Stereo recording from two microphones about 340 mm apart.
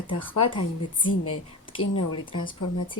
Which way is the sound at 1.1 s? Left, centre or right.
Left.